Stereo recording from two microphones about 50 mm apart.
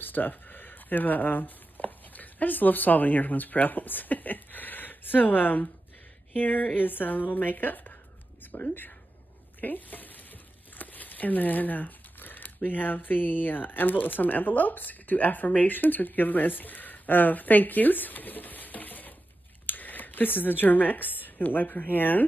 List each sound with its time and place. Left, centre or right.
0.0 s a woman's voice: left
9.6 s stir: left
10.8 s speech: left